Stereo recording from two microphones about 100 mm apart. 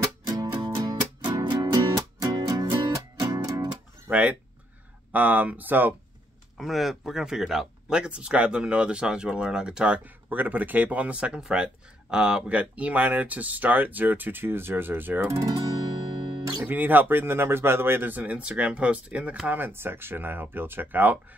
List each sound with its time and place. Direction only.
0.0 s music: 40° right (ahead or behind)
1.7 s music: 35° right (ahead or behind)
4.1 s speech: 15° right (ahead or behind)
6.6 s speech: centre (ahead or behind); by 15.5 s 30° right (ahead or behind)
16.6 s speech: 20° right (ahead or behind)